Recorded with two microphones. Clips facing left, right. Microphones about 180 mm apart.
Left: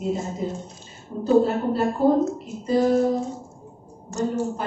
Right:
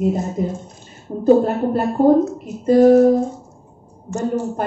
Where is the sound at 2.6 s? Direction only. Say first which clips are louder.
Right 9 dB; 55° right (ahead or behind).